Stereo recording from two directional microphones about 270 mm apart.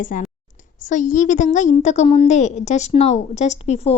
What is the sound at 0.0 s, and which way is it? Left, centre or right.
A woman's voice, left.